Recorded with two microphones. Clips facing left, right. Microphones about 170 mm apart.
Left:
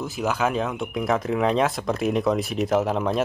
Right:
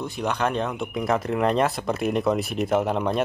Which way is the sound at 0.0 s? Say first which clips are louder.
Left 1 dB; 5° left (ahead or behind).